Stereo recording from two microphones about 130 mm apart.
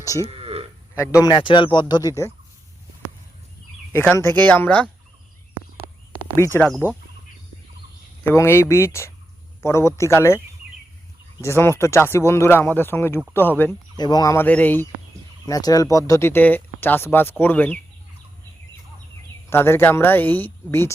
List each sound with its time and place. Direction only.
0.0 s speech: 25° left (ahead or behind)
0.3 s a sound: 50° right (ahead or behind)
0.9 s speech: 25° left (ahead or behind)
3.9 s speech: 20° left (ahead or behind)
6.3 s speech: 20° left (ahead or behind)
8.3 s speech: 20° left (ahead or behind)
13.9 s speech: 30° left (ahead or behind)
14.3 s speech: 15° left (ahead or behind)
15.4 s speech: 30° left (ahead or behind)
19.5 s speech: 20° left (ahead or behind)